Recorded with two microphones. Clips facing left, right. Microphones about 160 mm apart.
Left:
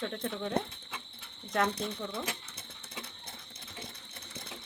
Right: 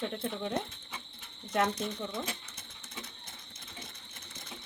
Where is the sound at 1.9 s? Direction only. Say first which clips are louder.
Right 1 dB; 15° right (ahead or behind).